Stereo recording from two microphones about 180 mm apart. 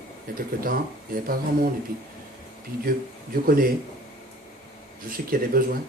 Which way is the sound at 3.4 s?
55° right (ahead or behind).